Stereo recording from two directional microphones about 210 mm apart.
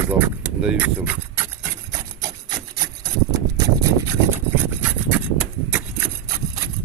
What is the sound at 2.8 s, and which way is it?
Wood, 15° right (ahead or behind).